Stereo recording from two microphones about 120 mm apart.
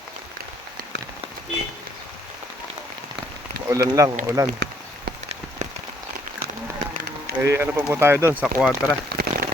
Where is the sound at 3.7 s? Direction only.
25° right (ahead or behind).